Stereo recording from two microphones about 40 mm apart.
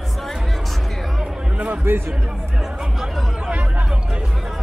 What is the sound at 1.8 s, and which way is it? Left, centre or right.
Speech, right.